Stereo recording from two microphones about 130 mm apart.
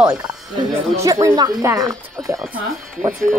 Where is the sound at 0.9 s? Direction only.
25° right (ahead or behind).